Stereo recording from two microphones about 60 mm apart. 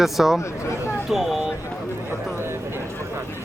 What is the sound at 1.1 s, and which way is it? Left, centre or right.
Speech, centre.